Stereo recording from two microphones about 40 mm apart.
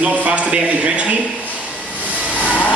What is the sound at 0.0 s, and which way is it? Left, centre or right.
Speech, right.